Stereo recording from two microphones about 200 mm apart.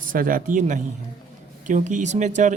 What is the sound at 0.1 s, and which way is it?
Speech, 45° right (ahead or behind).